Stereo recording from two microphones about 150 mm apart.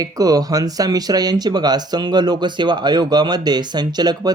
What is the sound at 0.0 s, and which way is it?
Speech, 25° right (ahead or behind).